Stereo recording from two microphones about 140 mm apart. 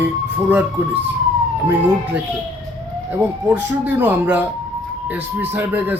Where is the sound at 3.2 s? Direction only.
15° right (ahead or behind).